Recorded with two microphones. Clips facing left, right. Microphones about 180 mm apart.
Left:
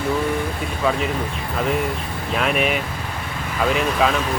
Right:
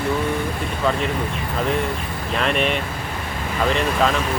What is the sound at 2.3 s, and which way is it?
Speech, 5° left (ahead or behind).